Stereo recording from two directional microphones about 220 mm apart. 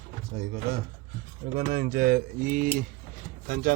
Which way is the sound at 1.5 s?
40° right (ahead or behind).